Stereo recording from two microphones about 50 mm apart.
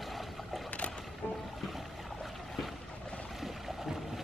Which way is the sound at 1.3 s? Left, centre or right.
Centre.